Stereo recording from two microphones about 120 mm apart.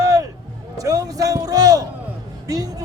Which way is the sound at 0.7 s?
30° right (ahead or behind).